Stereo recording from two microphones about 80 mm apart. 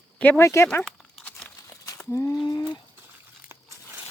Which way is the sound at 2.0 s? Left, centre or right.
Left.